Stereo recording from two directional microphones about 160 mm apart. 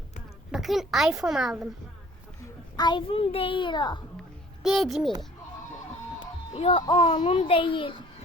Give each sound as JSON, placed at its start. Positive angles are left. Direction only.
{"t": 0.5, "sound": "a child's voice", "side_deg": 0}
{"t": 2.4, "sound": "a child's voice", "side_deg": 25}
{"t": 4.6, "sound": "a child's voice", "side_deg": 0}
{"t": 6.1, "sound": "music", "side_deg": 35}
{"t": 7.0, "sound": "a child's voice", "side_deg": 40}